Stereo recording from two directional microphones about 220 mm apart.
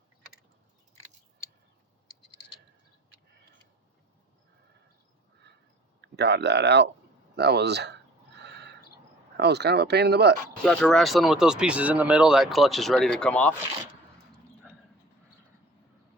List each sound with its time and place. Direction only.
6.0 s speech: 50° right (ahead or behind)
8.4 s a sound: 50° right (ahead or behind)
9.4 s speech: 50° right (ahead or behind)
10.6 s speech: 5° left (ahead or behind)